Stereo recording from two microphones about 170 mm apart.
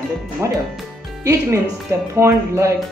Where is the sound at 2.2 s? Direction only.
15° right (ahead or behind).